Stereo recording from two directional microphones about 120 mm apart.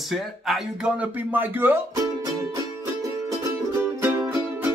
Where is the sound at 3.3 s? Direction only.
25° right (ahead or behind).